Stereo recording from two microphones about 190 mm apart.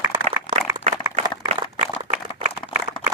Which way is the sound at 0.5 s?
25° left (ahead or behind).